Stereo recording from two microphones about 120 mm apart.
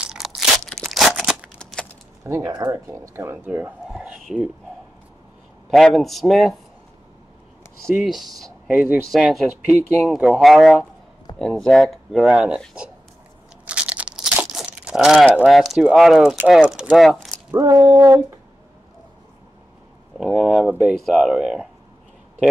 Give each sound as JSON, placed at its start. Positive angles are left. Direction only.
{"t": 0.0, "sound": "crunch", "side_deg": -5}
{"t": 0.8, "sound": "a sound", "side_deg": 0}
{"t": 2.2, "sound": "speech", "side_deg": -30}
{"t": 3.9, "sound": "speech", "side_deg": -5}
{"t": 5.7, "sound": "speech", "side_deg": 0}
{"t": 7.9, "sound": "speech", "side_deg": 0}
{"t": 8.6, "sound": "speech", "side_deg": -10}
{"t": 9.1, "sound": "speech", "side_deg": 0}
{"t": 13.7, "sound": "crunch", "side_deg": -10}
{"t": 15.4, "sound": "speech", "side_deg": 0}
{"t": 17.5, "sound": "speech", "side_deg": -25}
{"t": 20.2, "sound": "speech", "side_deg": 0}